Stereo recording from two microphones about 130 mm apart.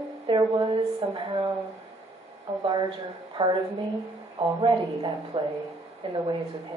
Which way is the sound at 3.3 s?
35° right (ahead or behind).